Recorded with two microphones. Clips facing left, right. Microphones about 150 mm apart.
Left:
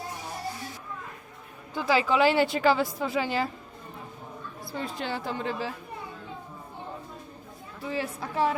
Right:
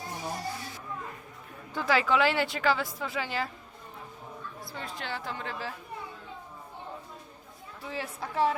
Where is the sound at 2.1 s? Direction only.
35° left (ahead or behind).